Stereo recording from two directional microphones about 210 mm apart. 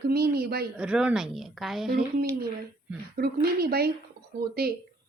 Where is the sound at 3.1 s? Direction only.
50° right (ahead or behind).